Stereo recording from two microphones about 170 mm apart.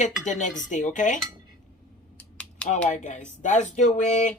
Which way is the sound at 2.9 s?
45° left (ahead or behind).